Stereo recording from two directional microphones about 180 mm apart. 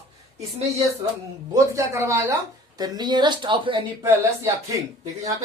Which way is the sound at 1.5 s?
15° right (ahead or behind).